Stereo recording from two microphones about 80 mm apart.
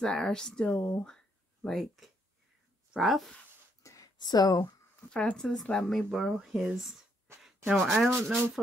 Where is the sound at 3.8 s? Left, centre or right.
Left.